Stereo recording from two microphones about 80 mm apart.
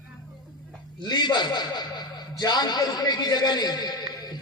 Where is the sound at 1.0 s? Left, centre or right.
Left.